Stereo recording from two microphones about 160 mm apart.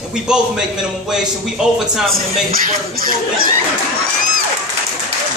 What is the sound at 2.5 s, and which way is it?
Speech, 65° right (ahead or behind).